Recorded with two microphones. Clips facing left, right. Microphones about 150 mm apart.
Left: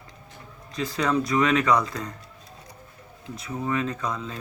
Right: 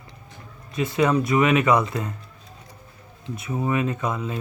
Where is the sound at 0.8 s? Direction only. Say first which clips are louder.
Right 4 dB; 20° right (ahead or behind).